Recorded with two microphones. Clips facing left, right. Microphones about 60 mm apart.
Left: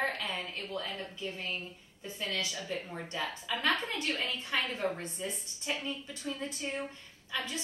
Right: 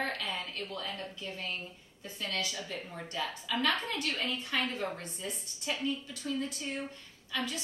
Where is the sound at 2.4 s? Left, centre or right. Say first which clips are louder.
Left 1 dB; left.